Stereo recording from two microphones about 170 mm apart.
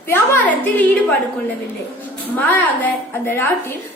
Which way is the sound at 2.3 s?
10° left (ahead or behind).